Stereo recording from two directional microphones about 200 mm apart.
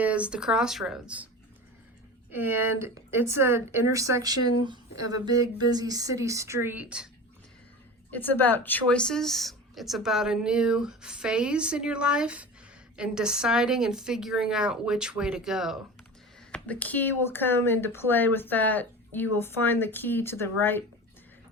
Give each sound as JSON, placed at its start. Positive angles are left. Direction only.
{"t": 0.0, "sound": "speech", "side_deg": -5}
{"t": 2.3, "sound": "speech", "side_deg": -10}
{"t": 8.1, "sound": "speech", "side_deg": 10}